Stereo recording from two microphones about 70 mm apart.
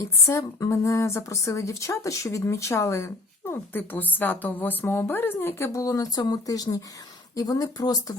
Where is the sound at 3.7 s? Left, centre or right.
Left.